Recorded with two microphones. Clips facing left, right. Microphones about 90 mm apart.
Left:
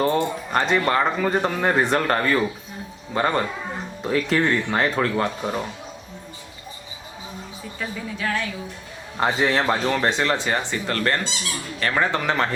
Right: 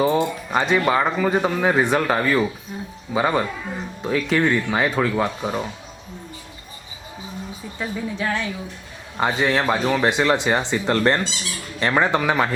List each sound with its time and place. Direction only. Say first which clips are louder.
0.0 s speech: right 2 dB; 5° right (ahead or behind)
7.8 s speech: right 3 dB; 20° right (ahead or behind)
9.1 s speech: right 1 dB; centre (ahead or behind)